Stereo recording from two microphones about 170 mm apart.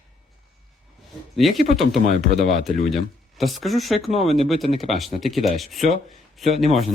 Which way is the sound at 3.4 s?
Centre (ahead or behind).